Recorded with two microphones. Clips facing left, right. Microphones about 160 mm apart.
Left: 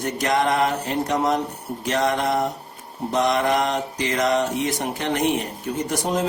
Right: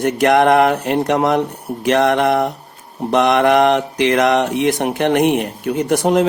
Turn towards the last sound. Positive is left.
turn(degrees=-65)  # may be behind; listen again after turning